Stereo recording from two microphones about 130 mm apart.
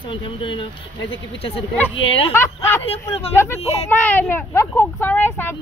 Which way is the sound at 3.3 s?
20° left (ahead or behind).